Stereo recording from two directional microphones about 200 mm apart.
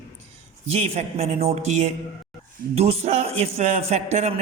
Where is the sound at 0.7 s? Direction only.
30° right (ahead or behind).